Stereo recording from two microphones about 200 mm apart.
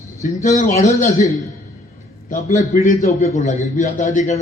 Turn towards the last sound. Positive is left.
turn(degrees=35)  # may be behind; listen again after turning